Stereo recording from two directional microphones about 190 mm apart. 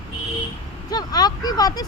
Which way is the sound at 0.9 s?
20° left (ahead or behind).